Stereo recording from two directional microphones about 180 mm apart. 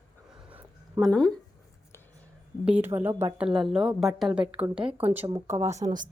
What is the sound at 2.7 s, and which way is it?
A woman's voice, 10° right (ahead or behind).